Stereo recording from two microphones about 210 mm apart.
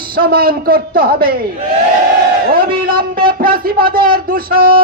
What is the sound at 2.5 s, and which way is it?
A man's voice, 45° right (ahead or behind).